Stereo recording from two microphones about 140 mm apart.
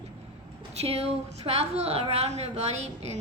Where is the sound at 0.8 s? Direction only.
45° right (ahead or behind).